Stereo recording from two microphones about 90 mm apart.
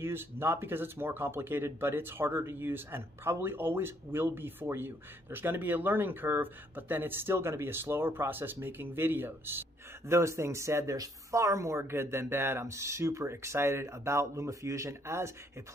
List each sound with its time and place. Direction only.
0.0 s speech: 25° right (ahead or behind)